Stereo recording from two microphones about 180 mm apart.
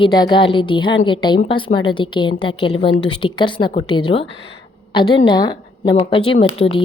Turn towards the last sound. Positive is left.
turn(degrees=30)  # may be behind; listen again after turning